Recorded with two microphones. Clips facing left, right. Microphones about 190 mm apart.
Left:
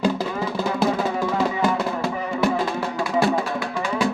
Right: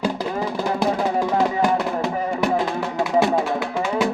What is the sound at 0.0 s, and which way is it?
Music, 15° right (ahead or behind).